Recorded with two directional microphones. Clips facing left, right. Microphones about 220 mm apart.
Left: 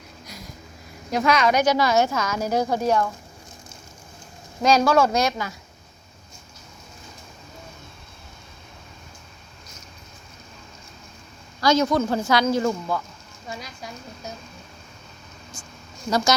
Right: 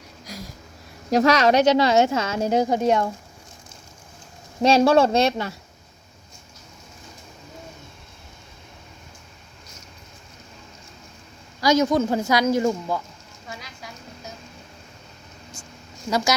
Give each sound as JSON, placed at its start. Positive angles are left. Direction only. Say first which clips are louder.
{"t": 1.1, "sound": "speech", "louder": "right 3 dB", "side_deg": -40}
{"t": 1.6, "sound": "a woman's voice", "louder": "right 3 dB", "side_deg": -25}
{"t": 4.6, "sound": "a woman's voice", "louder": "right 2 dB", "side_deg": -30}
{"t": 11.6, "sound": "speech", "louder": "right 1 dB", "side_deg": -20}
{"t": 15.6, "sound": "a sound", "louder": "right 1 dB", "side_deg": -25}